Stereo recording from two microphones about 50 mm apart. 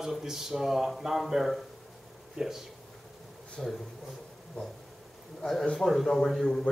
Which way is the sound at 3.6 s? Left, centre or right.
Centre.